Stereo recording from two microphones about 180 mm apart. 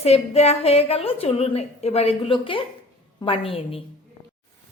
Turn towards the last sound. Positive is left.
turn(degrees=30)  # may be behind; listen again after turning